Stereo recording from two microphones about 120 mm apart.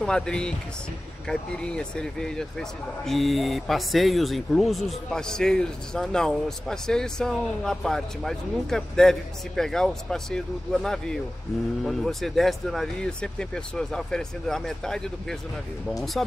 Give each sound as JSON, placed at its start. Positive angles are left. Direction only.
{"t": 0.0, "sound": "speech", "side_deg": 5}